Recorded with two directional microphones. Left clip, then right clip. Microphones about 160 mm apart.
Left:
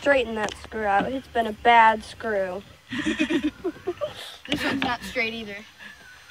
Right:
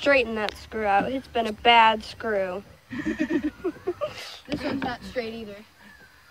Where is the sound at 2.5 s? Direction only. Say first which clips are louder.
Left 2 dB; centre (ahead or behind).